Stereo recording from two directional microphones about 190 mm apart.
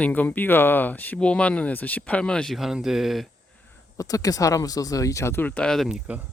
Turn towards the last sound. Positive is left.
turn(degrees=-5)  # may be behind; listen again after turning